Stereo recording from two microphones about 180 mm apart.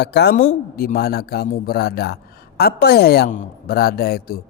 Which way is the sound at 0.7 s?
55° left (ahead or behind).